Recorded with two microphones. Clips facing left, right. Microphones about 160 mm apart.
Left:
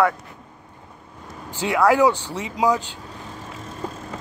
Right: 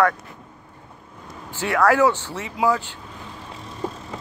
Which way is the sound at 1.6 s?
15° left (ahead or behind).